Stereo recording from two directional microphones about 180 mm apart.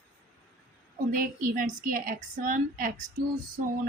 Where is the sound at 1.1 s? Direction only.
50° right (ahead or behind).